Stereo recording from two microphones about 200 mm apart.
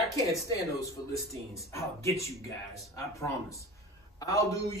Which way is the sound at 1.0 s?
20° left (ahead or behind).